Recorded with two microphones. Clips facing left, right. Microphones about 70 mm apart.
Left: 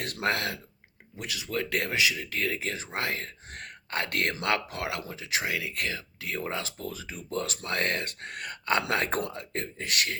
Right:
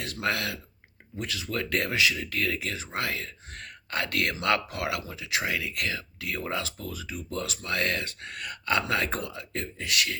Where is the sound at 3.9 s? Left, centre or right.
Left.